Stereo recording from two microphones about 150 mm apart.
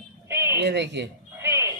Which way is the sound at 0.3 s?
15° right (ahead or behind).